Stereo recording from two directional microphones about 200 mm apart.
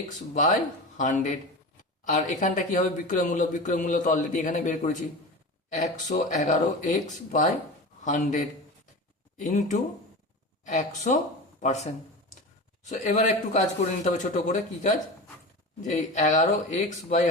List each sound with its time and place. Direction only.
0.9 s speech: 40° left (ahead or behind)